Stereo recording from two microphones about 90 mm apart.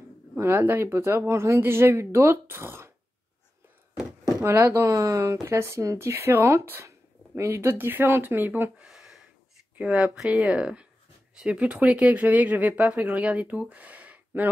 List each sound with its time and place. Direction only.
0.4 s speech: 25° right (ahead or behind)
4.5 s speech: 25° right (ahead or behind)
8.8 s a sound: 5° right (ahead or behind)
9.8 s speech: 15° right (ahead or behind)